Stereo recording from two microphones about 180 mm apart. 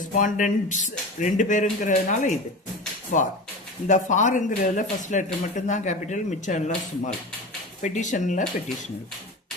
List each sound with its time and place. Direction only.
0.0 s speech: 45° left (ahead or behind)
3.8 s speech: 45° left (ahead or behind)